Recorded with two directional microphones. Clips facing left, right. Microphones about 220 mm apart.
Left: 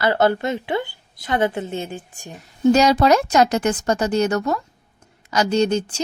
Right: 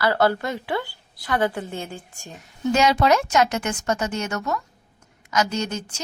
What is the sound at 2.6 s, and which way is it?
A woman's voice, 35° left (ahead or behind).